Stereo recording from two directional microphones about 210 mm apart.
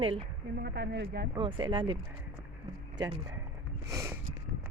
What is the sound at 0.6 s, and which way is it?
Speech, 55° right (ahead or behind).